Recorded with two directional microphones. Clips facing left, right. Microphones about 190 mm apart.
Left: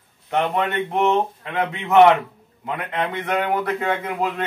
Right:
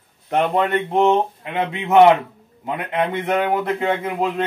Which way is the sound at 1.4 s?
20° right (ahead or behind).